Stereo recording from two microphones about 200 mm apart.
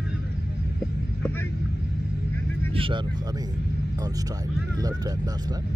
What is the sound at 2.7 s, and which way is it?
Vehicle, 25° right (ahead or behind).